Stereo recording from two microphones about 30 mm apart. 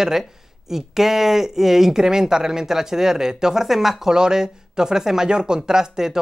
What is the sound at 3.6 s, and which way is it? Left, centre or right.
Speech, centre.